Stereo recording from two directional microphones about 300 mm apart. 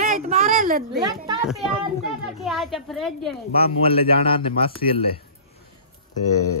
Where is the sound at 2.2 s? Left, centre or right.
Centre.